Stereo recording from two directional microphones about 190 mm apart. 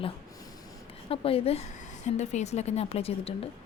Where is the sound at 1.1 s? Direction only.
30° left (ahead or behind).